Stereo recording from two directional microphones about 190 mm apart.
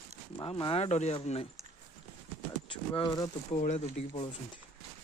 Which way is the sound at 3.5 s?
40° left (ahead or behind).